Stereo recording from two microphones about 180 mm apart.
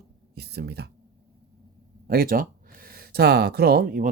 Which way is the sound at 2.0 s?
55° right (ahead or behind).